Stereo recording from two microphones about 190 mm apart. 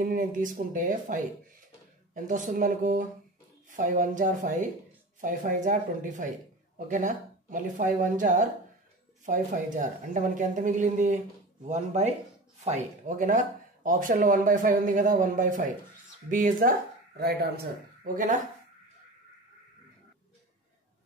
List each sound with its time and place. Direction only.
0.0 s a man's voice: 45° right (ahead or behind)